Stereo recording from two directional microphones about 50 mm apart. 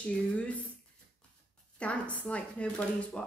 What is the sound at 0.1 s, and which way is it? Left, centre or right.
Speech, left.